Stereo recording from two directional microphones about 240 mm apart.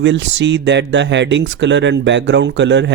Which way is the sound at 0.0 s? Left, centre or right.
Right.